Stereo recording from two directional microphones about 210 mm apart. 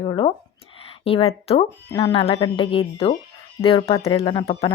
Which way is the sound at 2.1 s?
25° left (ahead or behind).